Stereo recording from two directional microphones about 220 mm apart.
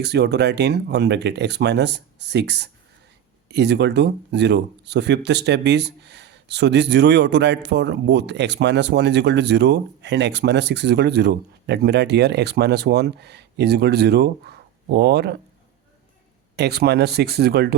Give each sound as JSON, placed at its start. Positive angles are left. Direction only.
{"t": 0.0, "sound": "speech", "side_deg": -50}
{"t": 16.6, "sound": "speech", "side_deg": -45}